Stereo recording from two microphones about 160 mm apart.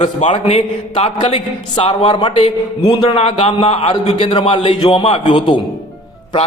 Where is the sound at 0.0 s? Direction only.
45° left (ahead or behind).